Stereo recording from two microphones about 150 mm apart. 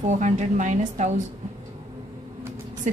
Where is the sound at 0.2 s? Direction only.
55° right (ahead or behind).